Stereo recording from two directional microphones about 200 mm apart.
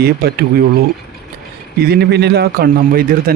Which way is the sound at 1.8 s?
50° right (ahead or behind).